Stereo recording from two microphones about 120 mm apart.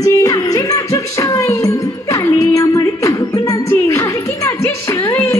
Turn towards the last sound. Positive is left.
turn(degrees=20)  # may be behind; listen again after turning